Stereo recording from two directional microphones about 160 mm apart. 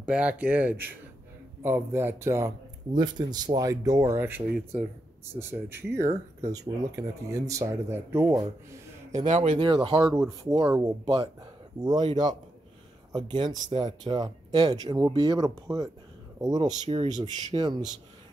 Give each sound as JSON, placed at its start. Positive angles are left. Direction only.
{"t": 0.0, "sound": "speech", "side_deg": -5}
{"t": 9.3, "sound": "speech", "side_deg": -45}
{"t": 9.6, "sound": "speech", "side_deg": -30}